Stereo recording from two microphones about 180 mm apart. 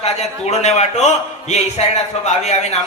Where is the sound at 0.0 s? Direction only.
40° left (ahead or behind).